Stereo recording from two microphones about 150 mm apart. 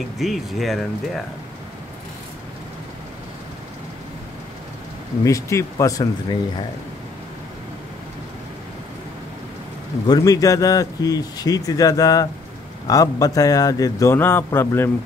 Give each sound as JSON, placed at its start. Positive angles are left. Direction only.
{"t": 0.2, "sound": "speech", "side_deg": 0}
{"t": 5.2, "sound": "a man's voice", "side_deg": 20}
{"t": 10.0, "sound": "a man's voice", "side_deg": 25}